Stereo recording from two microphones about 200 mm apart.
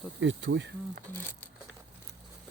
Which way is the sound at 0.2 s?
65° right (ahead or behind).